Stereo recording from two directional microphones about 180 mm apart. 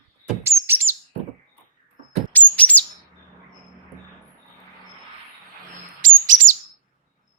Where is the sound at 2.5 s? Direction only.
10° left (ahead or behind).